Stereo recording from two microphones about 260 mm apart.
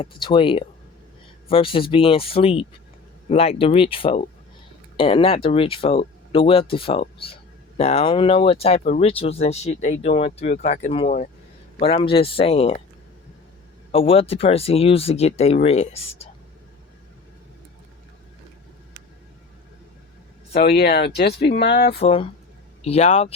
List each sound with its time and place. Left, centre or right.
0.0 s speech: centre
13.9 s speech: left
20.5 s speech: left
21.9 s speech: left